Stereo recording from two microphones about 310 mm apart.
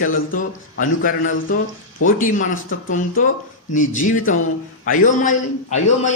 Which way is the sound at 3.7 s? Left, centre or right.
Left.